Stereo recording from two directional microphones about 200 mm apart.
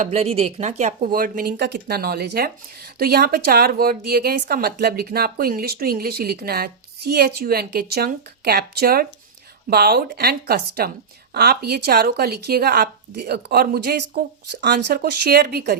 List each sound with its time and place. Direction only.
0.0 s speech: 30° right (ahead or behind); by 15.8 s 50° right (ahead or behind)